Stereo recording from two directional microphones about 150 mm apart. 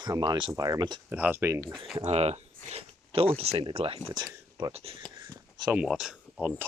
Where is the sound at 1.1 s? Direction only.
10° right (ahead or behind).